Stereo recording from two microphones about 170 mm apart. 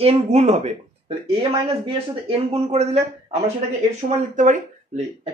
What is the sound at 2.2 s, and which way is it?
Speech, 35° right (ahead or behind).